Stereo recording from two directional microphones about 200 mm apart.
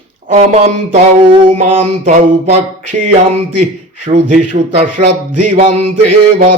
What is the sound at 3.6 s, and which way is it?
Mantra, 35° right (ahead or behind).